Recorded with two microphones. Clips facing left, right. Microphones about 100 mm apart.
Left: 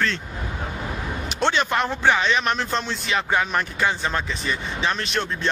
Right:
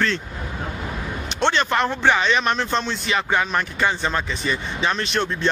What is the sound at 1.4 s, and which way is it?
A man's voice, 5° left (ahead or behind).